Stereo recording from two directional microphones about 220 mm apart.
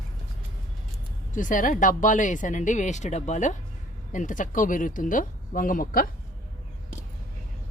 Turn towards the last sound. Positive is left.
turn(degrees=40)  # may be behind; listen again after turning